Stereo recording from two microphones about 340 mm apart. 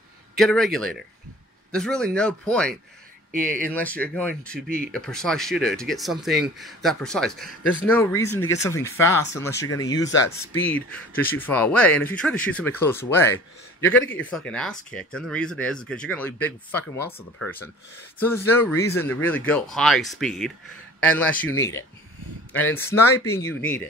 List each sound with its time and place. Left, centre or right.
0.4 s speech: centre
3.3 s speech: right
3.6 s a man's voice: centre